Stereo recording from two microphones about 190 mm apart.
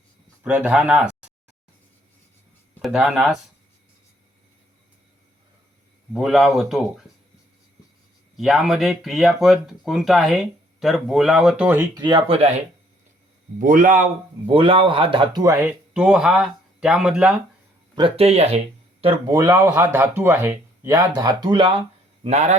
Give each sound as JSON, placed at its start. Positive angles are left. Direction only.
{"t": 0.4, "sound": "speech", "side_deg": -5}
{"t": 2.7, "sound": "speech", "side_deg": -5}
{"t": 6.1, "sound": "speech", "side_deg": 0}
{"t": 8.4, "sound": "speech", "side_deg": 0}
{"t": 12.0, "sound": "speech", "side_deg": -30}
{"t": 13.6, "sound": "speech", "side_deg": -45}
{"t": 14.4, "sound": "speech", "side_deg": -30}
{"t": 15.6, "sound": "speech", "side_deg": -5}
{"t": 17.9, "sound": "speech", "side_deg": -30}
{"t": 19.4, "sound": "speech", "side_deg": -15}
{"t": 22.2, "sound": "speech", "side_deg": -35}